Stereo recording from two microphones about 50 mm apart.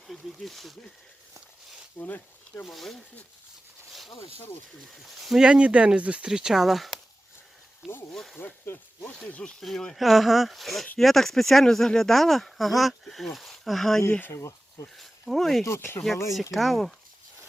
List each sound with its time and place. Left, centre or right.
0.1 s speech: centre
2.0 s speech: left
2.6 s speech: centre
5.0 s speech: centre
5.4 s speech: right
6.2 s speech: centre
8.1 s speech: centre
8.4 s speech: left
9.6 s speech: centre